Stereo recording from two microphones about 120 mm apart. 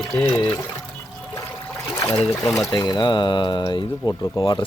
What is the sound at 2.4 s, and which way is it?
Speech, 25° left (ahead or behind).